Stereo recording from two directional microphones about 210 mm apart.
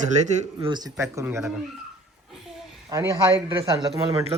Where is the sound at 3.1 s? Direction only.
15° right (ahead or behind).